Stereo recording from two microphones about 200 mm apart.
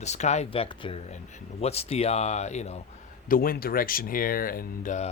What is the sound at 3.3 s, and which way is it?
Speech, 45° left (ahead or behind).